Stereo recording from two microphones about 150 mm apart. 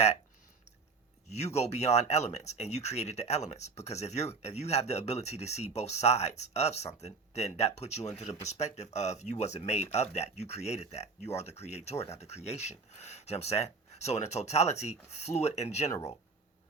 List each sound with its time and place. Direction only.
1.3 s speech: 45° left (ahead or behind)